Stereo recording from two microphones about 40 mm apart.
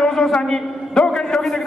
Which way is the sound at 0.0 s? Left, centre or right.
Centre.